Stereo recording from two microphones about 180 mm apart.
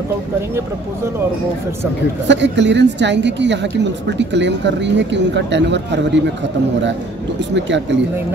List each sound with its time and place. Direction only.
2.2 s a woman's voice: 80° right
7.5 s speech: 80° right